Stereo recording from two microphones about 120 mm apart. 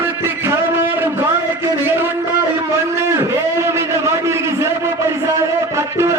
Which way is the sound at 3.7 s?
20° right (ahead or behind).